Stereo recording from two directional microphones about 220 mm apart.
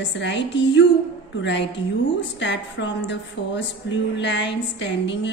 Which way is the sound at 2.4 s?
55° left (ahead or behind).